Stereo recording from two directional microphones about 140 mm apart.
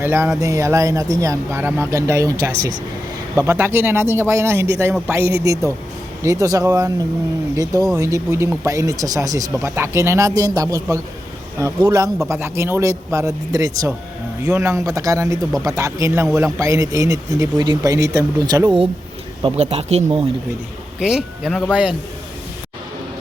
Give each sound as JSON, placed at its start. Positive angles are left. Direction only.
{"t": 0.0, "sound": "speech", "side_deg": -15}
{"t": 19.5, "sound": "speech", "side_deg": -50}
{"t": 21.0, "sound": "speech", "side_deg": -5}